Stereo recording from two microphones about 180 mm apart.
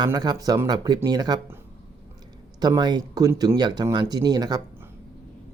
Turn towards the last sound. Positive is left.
turn(degrees=-20)  # may be behind; listen again after turning